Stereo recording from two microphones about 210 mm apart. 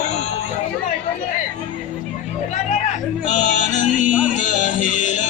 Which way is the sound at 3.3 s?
35° left (ahead or behind).